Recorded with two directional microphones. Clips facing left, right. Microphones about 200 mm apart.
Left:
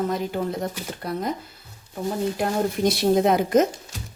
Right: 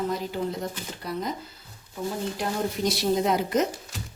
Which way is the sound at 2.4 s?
55° left (ahead or behind).